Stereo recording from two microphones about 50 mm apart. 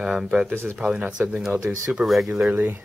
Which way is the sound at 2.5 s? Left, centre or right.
Right.